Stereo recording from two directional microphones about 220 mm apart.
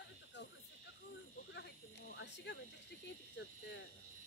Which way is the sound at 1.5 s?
50° left (ahead or behind).